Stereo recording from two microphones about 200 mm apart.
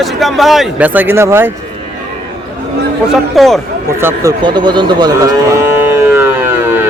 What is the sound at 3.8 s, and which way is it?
Speech, 15° right (ahead or behind).